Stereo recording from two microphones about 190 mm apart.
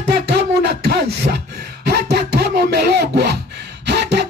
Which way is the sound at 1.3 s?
45° right (ahead or behind).